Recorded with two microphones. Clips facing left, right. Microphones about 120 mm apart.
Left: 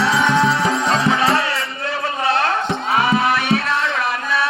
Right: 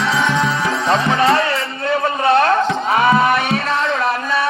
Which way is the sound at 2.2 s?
50° right (ahead or behind).